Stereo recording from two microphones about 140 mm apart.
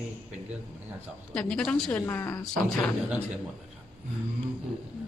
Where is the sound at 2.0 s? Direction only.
15° left (ahead or behind).